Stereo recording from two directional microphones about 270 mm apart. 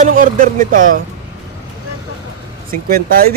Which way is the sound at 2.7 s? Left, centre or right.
Right.